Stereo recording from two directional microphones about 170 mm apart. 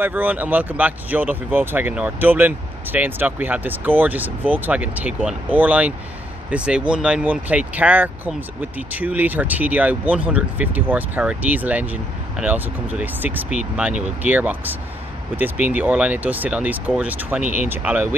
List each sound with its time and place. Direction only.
0.0 s speech: 10° right (ahead or behind)